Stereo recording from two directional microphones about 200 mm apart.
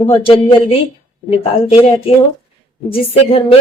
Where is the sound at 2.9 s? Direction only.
30° left (ahead or behind).